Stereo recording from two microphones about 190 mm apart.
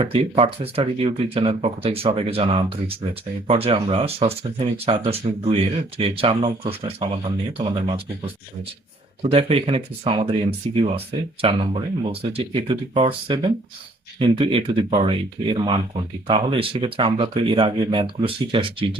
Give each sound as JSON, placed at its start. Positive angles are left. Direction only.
{"t": 0.0, "sound": "speech", "side_deg": -30}